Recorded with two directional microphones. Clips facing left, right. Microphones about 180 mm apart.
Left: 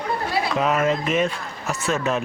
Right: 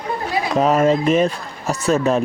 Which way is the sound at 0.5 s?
40° right (ahead or behind).